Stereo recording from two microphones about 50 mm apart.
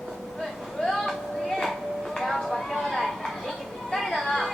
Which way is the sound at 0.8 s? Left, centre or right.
Centre.